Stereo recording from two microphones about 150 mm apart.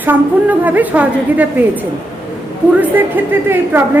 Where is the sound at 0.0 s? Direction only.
10° right (ahead or behind).